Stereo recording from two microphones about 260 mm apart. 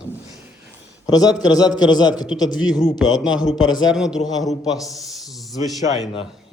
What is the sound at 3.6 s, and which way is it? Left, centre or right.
Speech, centre.